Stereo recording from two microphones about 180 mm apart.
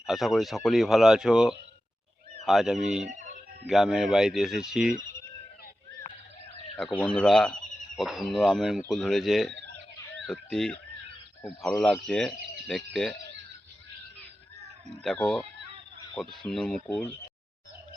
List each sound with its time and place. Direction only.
0.0 s speech: centre (ahead or behind)
3.1 s a sound: 45° right (ahead or behind)
3.7 s speech: centre (ahead or behind)
6.0 s a sound: 40° left (ahead or behind)
7.0 s speech: 5° left (ahead or behind)
15.0 s speech: 5° left (ahead or behind)